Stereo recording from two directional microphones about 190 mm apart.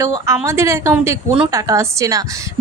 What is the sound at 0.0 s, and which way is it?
A woman's voice, 15° right (ahead or behind).